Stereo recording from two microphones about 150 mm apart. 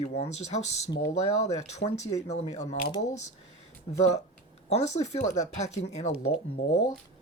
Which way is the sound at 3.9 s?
45° left (ahead or behind).